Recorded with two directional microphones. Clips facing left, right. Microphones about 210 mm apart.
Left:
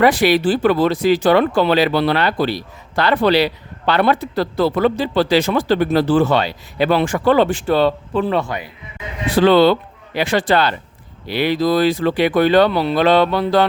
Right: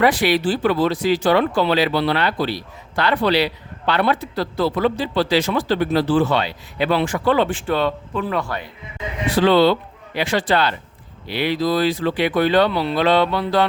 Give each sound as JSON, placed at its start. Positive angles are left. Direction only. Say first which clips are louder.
{"t": 0.0, "sound": "speech", "louder": "left 3 dB", "side_deg": 45}
{"t": 9.5, "sound": "speech", "louder": "left 3 dB", "side_deg": 55}